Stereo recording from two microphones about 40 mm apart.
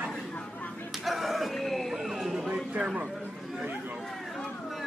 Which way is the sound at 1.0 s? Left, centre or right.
Centre.